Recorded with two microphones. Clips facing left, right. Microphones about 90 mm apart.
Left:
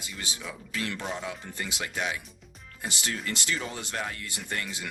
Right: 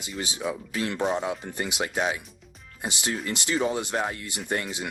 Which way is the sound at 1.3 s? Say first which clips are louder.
Right 6 dB; 20° right (ahead or behind).